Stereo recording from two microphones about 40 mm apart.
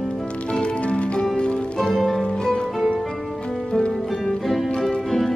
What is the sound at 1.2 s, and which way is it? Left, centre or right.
Music, left.